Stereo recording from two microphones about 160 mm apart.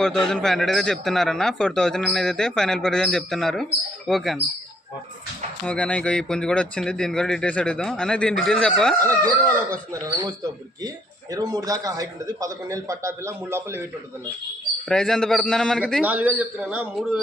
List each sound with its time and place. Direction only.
0.0 s a man's voice: 5° left (ahead or behind)
5.6 s a man's voice: 5° left (ahead or behind)
9.9 s speech: 25° right (ahead or behind)
14.8 s a man's voice: 5° left (ahead or behind)
15.9 s a man's voice: 10° right (ahead or behind)